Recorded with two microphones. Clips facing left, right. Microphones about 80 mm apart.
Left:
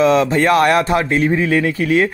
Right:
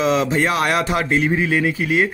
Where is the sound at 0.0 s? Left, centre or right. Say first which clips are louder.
Left 5 dB; left.